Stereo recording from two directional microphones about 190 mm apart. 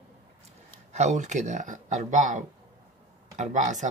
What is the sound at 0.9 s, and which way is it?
Speech, 35° right (ahead or behind).